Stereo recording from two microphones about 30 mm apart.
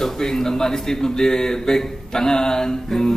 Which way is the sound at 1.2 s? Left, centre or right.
Left.